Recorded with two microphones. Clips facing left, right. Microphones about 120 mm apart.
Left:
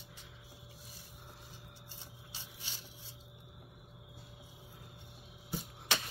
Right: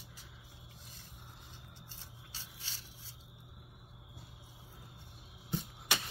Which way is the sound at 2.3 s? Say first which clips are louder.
Left 1 dB; 15° left (ahead or behind).